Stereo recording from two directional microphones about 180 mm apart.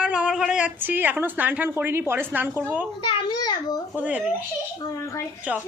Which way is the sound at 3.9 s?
5° right (ahead or behind).